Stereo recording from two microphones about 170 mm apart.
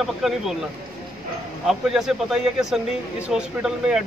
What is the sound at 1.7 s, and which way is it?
Speech, 5° right (ahead or behind).